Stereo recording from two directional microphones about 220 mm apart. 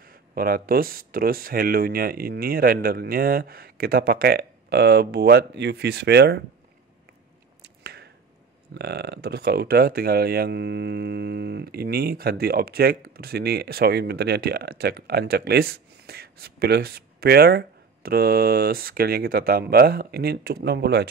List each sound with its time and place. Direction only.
0.0 s speech: 40° right (ahead or behind)
7.8 s finger snapping: 50° right (ahead or behind)
8.7 s speech: 50° right (ahead or behind)